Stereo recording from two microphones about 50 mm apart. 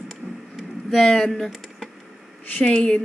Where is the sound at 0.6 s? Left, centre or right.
Centre.